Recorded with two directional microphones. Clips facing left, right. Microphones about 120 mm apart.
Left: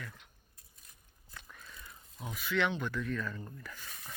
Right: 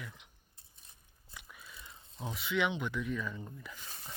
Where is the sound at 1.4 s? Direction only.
5° right (ahead or behind).